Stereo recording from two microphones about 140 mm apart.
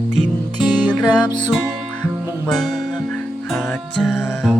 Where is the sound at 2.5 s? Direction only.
5° left (ahead or behind).